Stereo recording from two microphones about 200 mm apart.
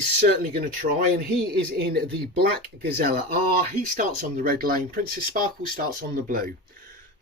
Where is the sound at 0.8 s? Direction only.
45° right (ahead or behind).